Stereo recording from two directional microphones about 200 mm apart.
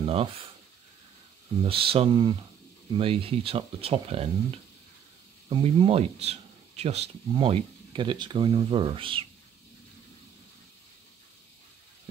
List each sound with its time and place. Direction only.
0.0 s speech: 30° right (ahead or behind)
1.6 s speech: 25° right (ahead or behind)
5.5 s speech: 25° right (ahead or behind)